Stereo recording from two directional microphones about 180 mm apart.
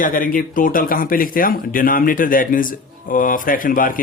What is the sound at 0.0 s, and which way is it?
Speech, 50° left (ahead or behind).